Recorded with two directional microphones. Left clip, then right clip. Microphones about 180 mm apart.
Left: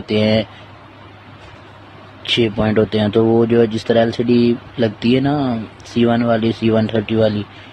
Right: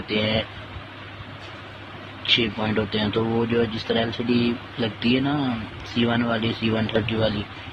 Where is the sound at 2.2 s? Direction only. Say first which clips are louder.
Left 5 dB; 55° left (ahead or behind).